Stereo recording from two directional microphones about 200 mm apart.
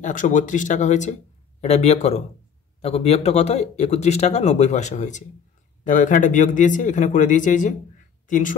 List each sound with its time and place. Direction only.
0.0 s speech: 40° left (ahead or behind)